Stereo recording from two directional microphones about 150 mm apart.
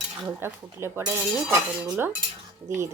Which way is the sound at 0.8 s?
20° right (ahead or behind).